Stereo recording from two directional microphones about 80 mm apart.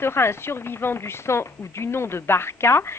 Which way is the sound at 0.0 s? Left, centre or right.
Left.